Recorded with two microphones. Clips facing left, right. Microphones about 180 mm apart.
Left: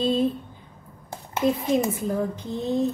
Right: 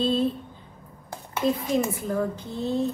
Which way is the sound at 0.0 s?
15° left (ahead or behind).